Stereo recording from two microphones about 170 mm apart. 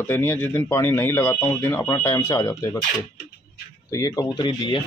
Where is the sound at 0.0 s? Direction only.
15° left (ahead or behind).